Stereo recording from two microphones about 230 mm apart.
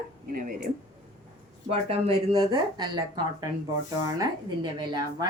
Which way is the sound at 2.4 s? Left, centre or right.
Centre.